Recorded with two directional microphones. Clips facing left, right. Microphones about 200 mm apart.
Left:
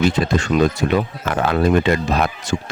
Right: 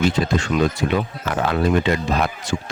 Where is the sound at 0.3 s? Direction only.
45° left (ahead or behind).